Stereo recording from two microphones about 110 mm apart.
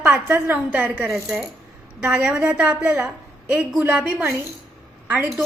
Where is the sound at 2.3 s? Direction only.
20° right (ahead or behind).